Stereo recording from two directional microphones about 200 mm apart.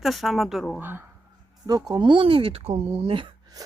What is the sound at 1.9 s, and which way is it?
Speech, 25° right (ahead or behind).